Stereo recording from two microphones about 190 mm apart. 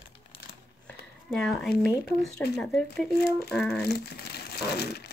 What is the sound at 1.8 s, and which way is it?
Speech, centre (ahead or behind).